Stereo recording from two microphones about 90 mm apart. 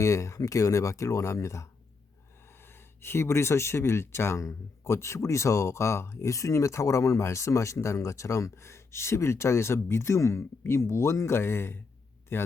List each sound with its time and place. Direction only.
0.0 s speech: 35° left (ahead or behind)
3.0 s speech: 30° left (ahead or behind)